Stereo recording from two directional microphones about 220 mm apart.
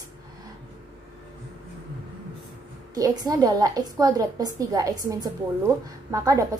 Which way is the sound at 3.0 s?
15° right (ahead or behind).